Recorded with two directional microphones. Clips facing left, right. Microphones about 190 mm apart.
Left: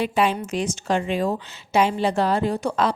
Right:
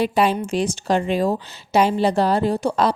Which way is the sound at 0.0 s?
35° right (ahead or behind).